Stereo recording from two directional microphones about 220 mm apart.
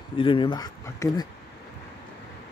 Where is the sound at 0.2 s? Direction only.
20° left (ahead or behind).